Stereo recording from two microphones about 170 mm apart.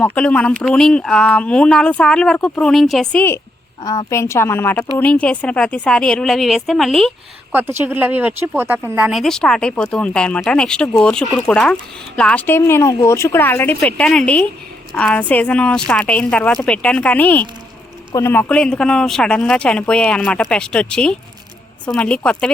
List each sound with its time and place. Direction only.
0.0 s speech: 5° left (ahead or behind)
7.5 s speech: 15° right (ahead or behind); by 22.5 s 5° left (ahead or behind)